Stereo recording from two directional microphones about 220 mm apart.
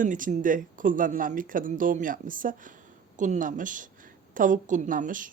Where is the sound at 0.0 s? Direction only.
35° right (ahead or behind).